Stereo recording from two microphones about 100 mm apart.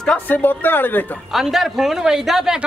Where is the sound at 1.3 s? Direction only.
Centre (ahead or behind).